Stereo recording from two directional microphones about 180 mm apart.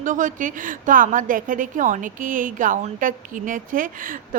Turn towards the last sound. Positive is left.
turn(degrees=-50)  # may be behind; listen again after turning